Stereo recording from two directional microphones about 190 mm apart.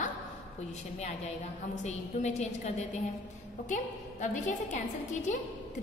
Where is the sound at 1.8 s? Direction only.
35° left (ahead or behind).